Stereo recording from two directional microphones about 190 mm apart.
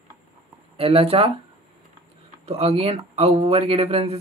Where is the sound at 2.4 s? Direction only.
30° right (ahead or behind).